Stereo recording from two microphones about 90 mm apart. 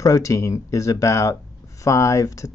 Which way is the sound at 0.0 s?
35° left (ahead or behind).